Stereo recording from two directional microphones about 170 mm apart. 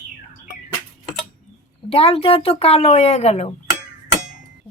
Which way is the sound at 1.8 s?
35° left (ahead or behind).